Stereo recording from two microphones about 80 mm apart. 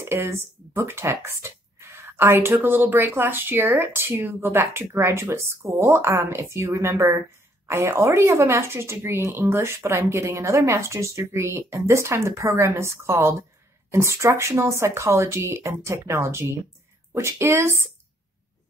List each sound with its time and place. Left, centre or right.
0.0 s speech: right